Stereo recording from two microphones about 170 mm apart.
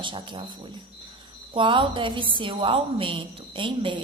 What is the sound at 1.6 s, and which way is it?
A woman's voice, 30° right (ahead or behind).